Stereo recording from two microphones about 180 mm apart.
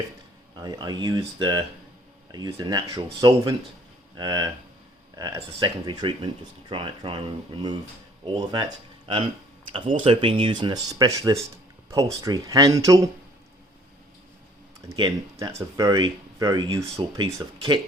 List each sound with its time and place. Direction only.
0.5 s speech: 25° right (ahead or behind)
9.7 s speech: 30° right (ahead or behind)
14.8 s speech: 20° right (ahead or behind)